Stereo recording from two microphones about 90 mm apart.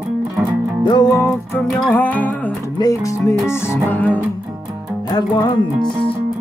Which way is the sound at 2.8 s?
35° left (ahead or behind).